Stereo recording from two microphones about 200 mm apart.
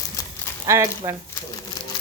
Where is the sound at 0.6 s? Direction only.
15° right (ahead or behind).